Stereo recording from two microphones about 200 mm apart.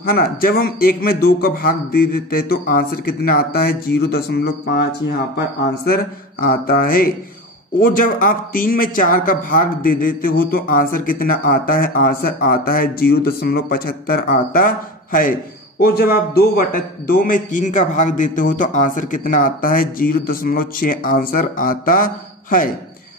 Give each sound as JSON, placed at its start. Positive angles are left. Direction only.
{"t": 0.0, "sound": "a man's voice", "side_deg": 45}
{"t": 6.4, "sound": "a man's voice", "side_deg": 45}